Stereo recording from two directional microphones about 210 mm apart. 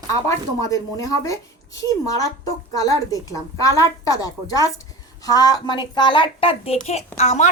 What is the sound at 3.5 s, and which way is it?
A woman's voice, 15° left (ahead or behind).